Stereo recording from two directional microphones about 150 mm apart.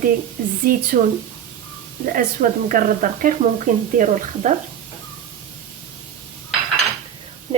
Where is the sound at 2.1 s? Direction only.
70° right (ahead or behind).